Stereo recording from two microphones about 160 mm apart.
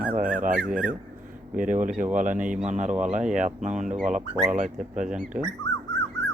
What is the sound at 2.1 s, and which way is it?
Speech, 55° right (ahead or behind).